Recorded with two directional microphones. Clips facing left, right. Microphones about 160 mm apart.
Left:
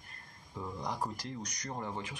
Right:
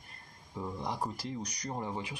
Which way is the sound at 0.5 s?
10° right (ahead or behind).